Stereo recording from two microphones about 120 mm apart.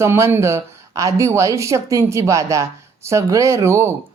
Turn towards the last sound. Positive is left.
turn(degrees=-20)  # may be behind; listen again after turning